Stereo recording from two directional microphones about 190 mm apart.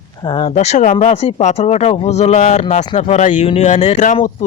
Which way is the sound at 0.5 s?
40° left (ahead or behind).